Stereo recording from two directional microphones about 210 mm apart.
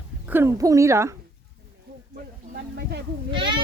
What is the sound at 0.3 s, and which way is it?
Speech, 10° right (ahead or behind).